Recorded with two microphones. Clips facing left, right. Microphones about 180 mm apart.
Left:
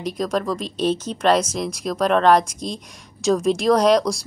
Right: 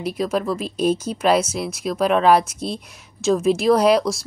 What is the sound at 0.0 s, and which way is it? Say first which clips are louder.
Speech: right 1 dB; 5° right (ahead or behind).